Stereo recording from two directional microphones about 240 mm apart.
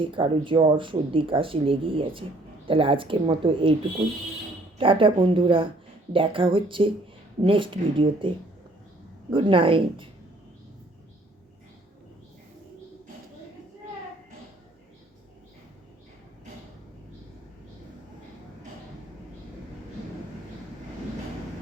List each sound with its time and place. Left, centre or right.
0.0 s speech: right
4.8 s speech: right
9.3 s speech: right